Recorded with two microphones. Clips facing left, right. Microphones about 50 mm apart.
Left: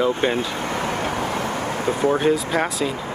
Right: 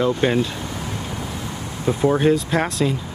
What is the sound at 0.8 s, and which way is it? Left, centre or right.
Vehicle, left.